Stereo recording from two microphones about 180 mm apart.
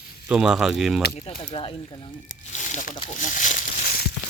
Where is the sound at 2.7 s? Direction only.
45° left (ahead or behind).